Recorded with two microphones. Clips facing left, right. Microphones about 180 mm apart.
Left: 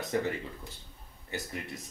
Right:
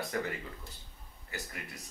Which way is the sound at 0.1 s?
25° left (ahead or behind).